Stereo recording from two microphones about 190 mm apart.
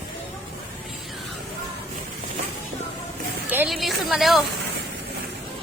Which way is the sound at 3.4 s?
10° right (ahead or behind).